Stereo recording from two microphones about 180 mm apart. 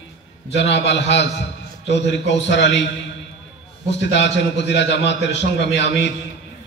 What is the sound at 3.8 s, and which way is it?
A man's voice, 75° left (ahead or behind).